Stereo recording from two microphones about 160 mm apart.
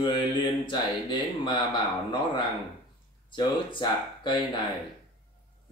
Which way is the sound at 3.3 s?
30° left (ahead or behind).